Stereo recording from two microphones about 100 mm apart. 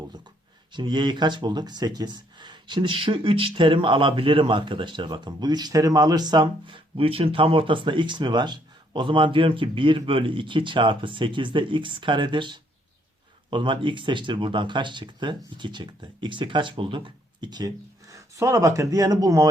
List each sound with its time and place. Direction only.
0.7 s speech: 50° right (ahead or behind)
18.1 s speech: 30° right (ahead or behind)